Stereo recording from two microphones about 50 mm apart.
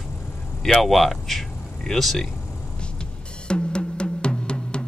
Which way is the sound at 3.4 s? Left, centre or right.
Centre.